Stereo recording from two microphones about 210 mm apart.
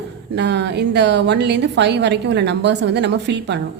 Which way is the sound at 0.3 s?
55° right (ahead or behind).